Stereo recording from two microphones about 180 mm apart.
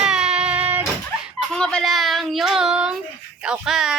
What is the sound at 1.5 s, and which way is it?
Speech, 5° left (ahead or behind).